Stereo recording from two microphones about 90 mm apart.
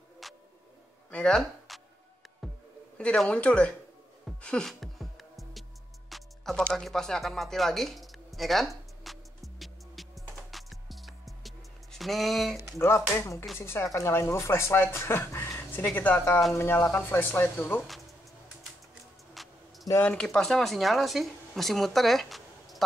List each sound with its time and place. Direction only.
0.2 s a sound: centre (ahead or behind)
1.1 s speech: 10° left (ahead or behind)
3.0 s speech: 10° left (ahead or behind)
4.4 s music: 10° left (ahead or behind)
6.5 s music: 10° left (ahead or behind)
12.7 s speech: 30° left (ahead or behind)
19.3 s a sound: centre (ahead or behind)
20.1 s speech: 10° left (ahead or behind)